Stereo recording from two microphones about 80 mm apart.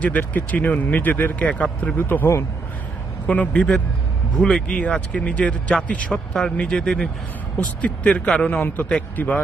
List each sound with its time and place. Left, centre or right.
0.0 s speech: left
3.3 s speech: centre